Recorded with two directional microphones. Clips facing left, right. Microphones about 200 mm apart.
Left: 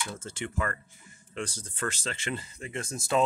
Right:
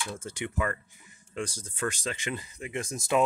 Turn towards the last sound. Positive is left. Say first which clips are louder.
# right 1 dB
turn(degrees=-15)  # may be behind; listen again after turning